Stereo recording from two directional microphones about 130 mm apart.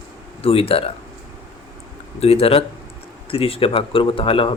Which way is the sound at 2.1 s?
50° left (ahead or behind).